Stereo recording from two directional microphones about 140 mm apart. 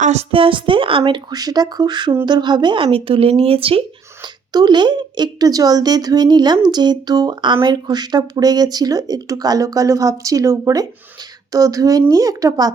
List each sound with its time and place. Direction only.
0.0 s a woman's voice: 50° right (ahead or behind); by 12.7 s 25° right (ahead or behind)